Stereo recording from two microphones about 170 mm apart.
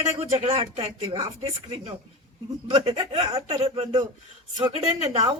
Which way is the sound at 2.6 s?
35° right (ahead or behind).